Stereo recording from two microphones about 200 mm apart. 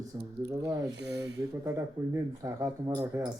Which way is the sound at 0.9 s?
55° right (ahead or behind).